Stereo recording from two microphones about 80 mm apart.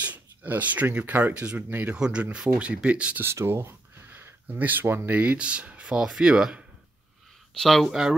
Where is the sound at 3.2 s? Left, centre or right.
Right; by 6.6 s centre.